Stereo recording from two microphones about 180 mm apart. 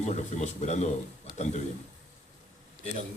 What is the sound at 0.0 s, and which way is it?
Speech, 40° left (ahead or behind).